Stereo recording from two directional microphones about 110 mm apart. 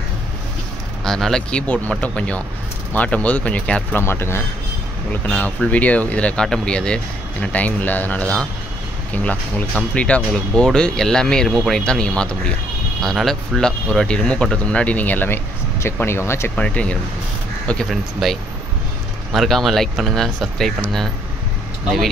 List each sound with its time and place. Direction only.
1.0 s speech: 5° left (ahead or behind)
4.0 s speech: 20° left (ahead or behind)
17.8 s speech: centre (ahead or behind)